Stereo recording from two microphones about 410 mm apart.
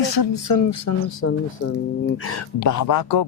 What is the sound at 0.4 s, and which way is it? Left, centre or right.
Speech, left.